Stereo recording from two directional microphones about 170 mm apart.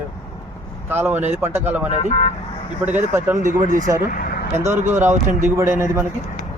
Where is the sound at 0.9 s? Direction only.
10° right (ahead or behind).